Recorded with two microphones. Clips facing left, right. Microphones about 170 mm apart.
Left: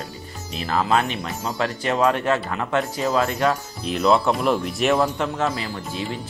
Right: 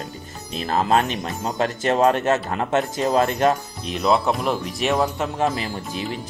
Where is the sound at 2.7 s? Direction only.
25° right (ahead or behind).